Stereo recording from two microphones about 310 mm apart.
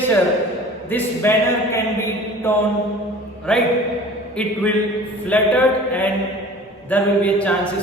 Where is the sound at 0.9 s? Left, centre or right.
Centre.